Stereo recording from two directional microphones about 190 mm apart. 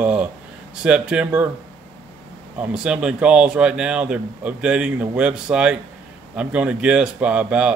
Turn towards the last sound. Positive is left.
turn(degrees=-5)  # may be behind; listen again after turning